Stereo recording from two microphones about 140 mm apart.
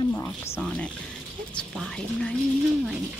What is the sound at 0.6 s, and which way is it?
Speech, 5° left (ahead or behind).